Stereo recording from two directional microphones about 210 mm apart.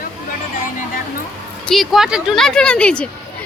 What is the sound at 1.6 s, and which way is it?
Speech, centre (ahead or behind).